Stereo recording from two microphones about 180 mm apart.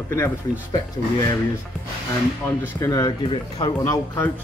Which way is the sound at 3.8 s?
10° left (ahead or behind).